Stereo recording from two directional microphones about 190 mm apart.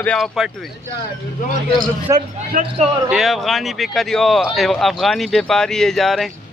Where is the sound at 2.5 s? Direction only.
45° right (ahead or behind).